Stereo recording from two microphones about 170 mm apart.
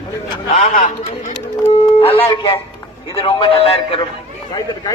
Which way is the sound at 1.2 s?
35° left (ahead or behind).